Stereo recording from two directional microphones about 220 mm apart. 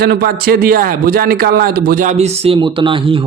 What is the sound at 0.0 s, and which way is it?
A man's voice, 45° right (ahead or behind).